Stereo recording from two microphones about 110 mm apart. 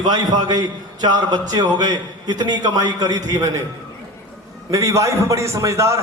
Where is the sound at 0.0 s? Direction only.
40° right (ahead or behind).